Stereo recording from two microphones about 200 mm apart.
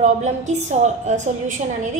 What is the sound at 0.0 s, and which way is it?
A child's voice, 35° right (ahead or behind).